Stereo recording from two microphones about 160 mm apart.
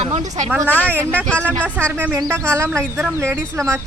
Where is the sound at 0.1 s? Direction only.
50° right (ahead or behind).